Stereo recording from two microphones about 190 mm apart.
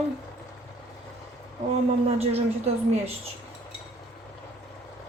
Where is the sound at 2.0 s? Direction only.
35° right (ahead or behind).